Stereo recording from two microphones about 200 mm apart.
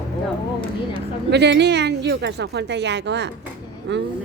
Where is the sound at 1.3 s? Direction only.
60° right (ahead or behind).